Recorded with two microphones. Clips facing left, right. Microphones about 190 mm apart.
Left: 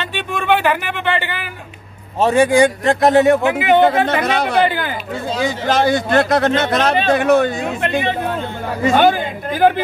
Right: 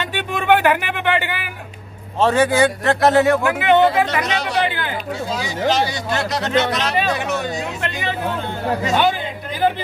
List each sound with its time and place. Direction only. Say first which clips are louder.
0.0 s speech: even; 15° right (ahead or behind)
2.1 s a man's voice: left 3 dB; 10° left (ahead or behind)
3.8 s speech: left 2 dB; 55° left (ahead or behind)